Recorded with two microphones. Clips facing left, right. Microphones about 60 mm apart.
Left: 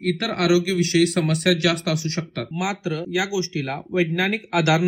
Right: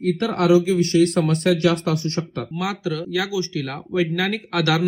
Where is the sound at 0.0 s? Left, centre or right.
Left.